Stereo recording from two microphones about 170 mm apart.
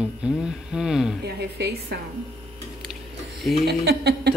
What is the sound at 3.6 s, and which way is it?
Speech, 75° right (ahead or behind).